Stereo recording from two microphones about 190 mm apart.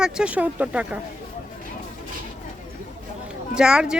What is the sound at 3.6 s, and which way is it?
Speech, 5° right (ahead or behind).